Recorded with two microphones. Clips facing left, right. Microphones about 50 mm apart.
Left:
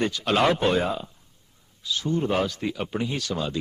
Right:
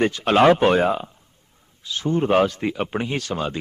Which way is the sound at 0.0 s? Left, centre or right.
Right.